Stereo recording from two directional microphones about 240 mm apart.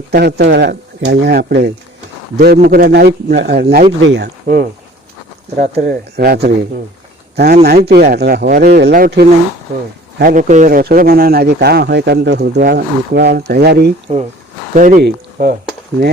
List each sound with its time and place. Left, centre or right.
0.1 s speech: right
5.7 s speech: right